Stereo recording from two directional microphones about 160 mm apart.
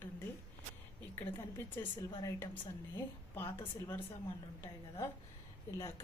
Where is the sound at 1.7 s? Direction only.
25° left (ahead or behind).